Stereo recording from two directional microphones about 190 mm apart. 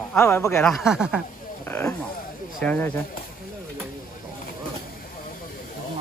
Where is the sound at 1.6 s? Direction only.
10° left (ahead or behind).